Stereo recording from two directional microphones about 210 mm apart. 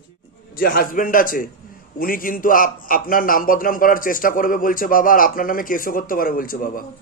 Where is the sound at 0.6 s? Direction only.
40° left (ahead or behind).